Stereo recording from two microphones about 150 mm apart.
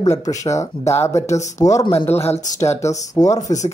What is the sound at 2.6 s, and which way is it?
Speech, 20° left (ahead or behind).